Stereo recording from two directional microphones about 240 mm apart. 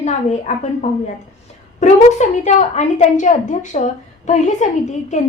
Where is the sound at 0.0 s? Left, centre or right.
Left.